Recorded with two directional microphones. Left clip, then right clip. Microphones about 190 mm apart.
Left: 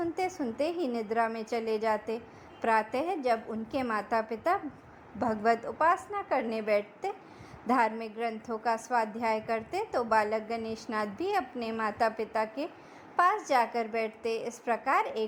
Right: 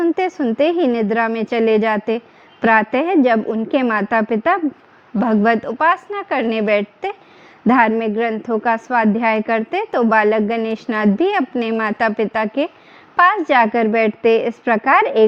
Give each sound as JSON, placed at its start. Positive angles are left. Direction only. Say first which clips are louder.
{"t": 0.0, "sound": "a woman's voice", "louder": "right 14 dB", "side_deg": -20}